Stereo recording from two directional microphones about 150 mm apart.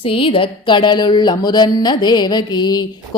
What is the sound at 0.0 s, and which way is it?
Speech, 35° left (ahead or behind).